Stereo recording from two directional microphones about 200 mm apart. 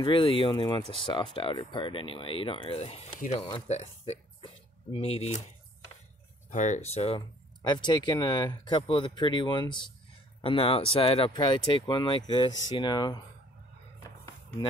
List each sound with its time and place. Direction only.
0.0 s speech: 25° left (ahead or behind)
6.5 s speech: 35° left (ahead or behind); by 13.2 s 20° left (ahead or behind)
14.0 s a sound: 20° left (ahead or behind)